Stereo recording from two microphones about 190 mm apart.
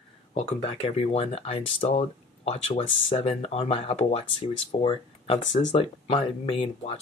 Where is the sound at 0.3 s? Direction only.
35° left (ahead or behind).